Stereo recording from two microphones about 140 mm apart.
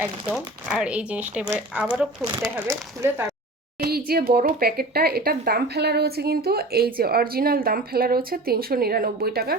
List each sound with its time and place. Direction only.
0.3 s speech: centre (ahead or behind)
3.0 s speech: 15° right (ahead or behind)
3.8 s speech: 90° right